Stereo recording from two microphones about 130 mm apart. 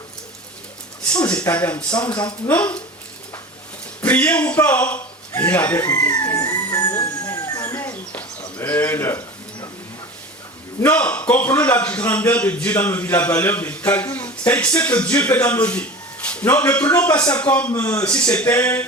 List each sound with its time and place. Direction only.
1.1 s a man's voice: 10° left (ahead or behind)
4.0 s speech: 10° left (ahead or behind)
6.5 s a sound: 30° left (ahead or behind)
8.5 s a man's voice: 15° left (ahead or behind)
10.8 s a man's voice: 15° left (ahead or behind)
16.3 s a sound: 15° left (ahead or behind)
16.6 s a man's voice: 15° left (ahead or behind)